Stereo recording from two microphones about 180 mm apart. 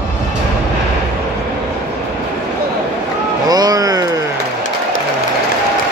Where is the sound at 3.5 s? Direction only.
20° right (ahead or behind).